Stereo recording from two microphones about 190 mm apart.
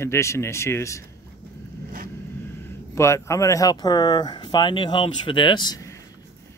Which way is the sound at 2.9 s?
15° left (ahead or behind).